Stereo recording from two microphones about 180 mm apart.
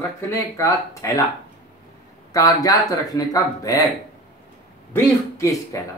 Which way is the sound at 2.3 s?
20° left (ahead or behind).